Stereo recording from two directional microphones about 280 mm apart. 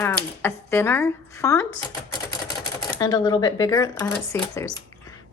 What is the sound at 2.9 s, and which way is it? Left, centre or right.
A woman's voice, centre.